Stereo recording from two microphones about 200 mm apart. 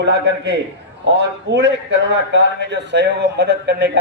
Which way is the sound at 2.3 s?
60° right (ahead or behind).